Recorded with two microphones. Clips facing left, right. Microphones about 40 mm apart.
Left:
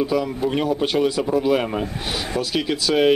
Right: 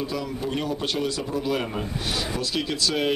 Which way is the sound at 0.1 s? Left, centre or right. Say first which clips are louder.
Left 7 dB; centre.